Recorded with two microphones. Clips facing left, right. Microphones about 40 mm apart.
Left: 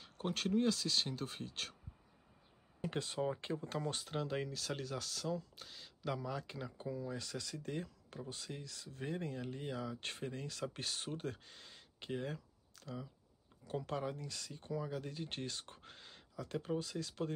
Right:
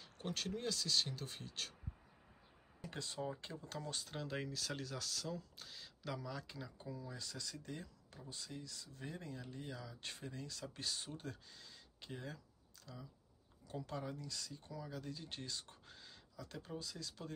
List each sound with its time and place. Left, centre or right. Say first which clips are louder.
0.0 s speech: left 5 dB; left
2.8 s speech: left 7 dB; left
4.1 s speech: left 3 dB; centre
6.2 s speech: left 5 dB; left
7.2 s speech: left 4 dB; left